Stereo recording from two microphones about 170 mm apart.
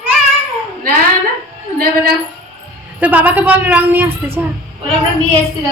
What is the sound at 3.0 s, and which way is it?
A woman's voice, 10° right (ahead or behind).